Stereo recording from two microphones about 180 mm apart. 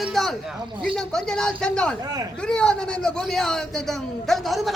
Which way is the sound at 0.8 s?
5° left (ahead or behind).